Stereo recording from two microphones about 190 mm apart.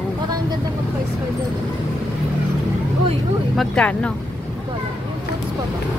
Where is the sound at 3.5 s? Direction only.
5° left (ahead or behind).